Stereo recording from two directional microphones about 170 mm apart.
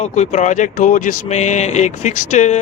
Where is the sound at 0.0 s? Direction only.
40° left (ahead or behind).